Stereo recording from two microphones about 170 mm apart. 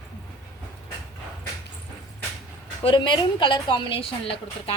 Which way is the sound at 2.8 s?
30° left (ahead or behind).